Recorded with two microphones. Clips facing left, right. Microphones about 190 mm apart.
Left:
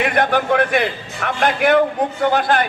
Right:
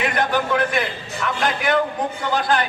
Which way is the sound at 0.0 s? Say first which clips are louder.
Left 4 dB; 60° left (ahead or behind).